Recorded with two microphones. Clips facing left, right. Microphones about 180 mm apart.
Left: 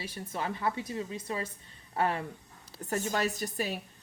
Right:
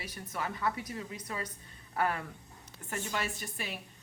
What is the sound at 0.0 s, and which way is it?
A woman's voice, 25° left (ahead or behind).